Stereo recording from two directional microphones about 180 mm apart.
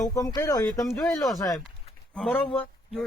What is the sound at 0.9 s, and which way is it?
Speech, centre (ahead or behind).